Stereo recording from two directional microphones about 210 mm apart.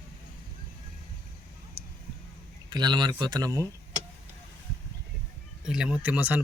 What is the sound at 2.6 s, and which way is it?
Speech, 20° right (ahead or behind).